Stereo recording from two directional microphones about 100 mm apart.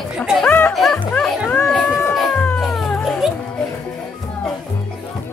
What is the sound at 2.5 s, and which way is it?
Cat, centre (ahead or behind).